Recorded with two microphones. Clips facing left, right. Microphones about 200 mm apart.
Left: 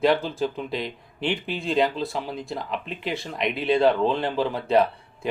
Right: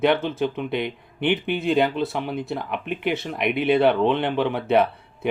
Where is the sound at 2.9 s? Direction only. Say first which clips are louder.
Right 5 dB; 70° right (ahead or behind).